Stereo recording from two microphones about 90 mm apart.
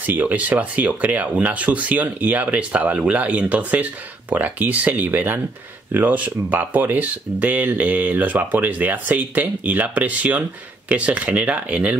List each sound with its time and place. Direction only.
0.0 s speech: 20° right (ahead or behind)